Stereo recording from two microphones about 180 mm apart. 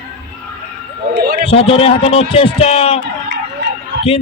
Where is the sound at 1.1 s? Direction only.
65° right (ahead or behind).